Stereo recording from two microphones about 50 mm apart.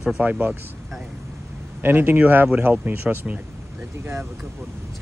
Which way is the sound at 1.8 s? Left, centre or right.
Right.